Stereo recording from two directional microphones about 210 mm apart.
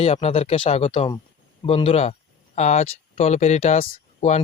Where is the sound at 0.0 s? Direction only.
30° left (ahead or behind).